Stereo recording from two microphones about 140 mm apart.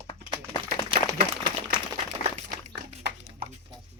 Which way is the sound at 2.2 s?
55° left (ahead or behind).